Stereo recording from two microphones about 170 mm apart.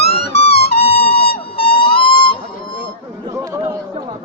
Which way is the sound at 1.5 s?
30° left (ahead or behind).